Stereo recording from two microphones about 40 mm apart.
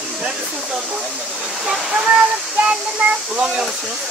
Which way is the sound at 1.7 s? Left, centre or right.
Centre.